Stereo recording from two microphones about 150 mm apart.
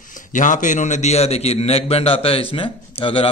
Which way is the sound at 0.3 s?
60° left (ahead or behind).